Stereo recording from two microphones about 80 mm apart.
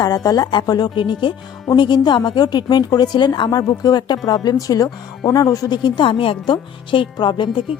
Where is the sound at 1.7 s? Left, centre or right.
Left.